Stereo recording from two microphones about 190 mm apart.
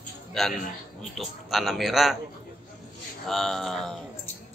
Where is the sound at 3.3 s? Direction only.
Centre (ahead or behind).